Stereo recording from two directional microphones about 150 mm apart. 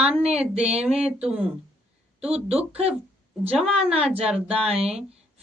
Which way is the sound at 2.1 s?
45° right (ahead or behind).